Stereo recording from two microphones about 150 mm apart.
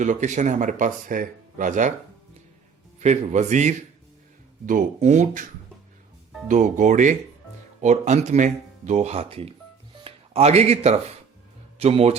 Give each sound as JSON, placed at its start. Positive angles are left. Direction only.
{"t": 0.0, "sound": "speech", "side_deg": -55}
{"t": 3.0, "sound": "speech", "side_deg": -50}
{"t": 6.5, "sound": "speech", "side_deg": -55}